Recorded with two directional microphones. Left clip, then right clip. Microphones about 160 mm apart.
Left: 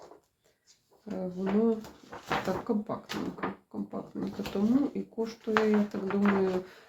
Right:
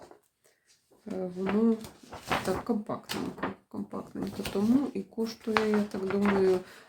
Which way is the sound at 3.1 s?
85° right.